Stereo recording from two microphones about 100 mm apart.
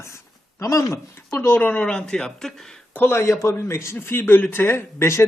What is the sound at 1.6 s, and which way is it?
Speech, 15° left (ahead or behind).